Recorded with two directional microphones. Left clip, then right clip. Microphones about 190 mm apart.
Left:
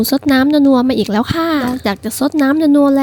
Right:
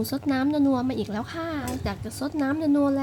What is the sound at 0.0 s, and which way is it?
Speech, 45° left (ahead or behind).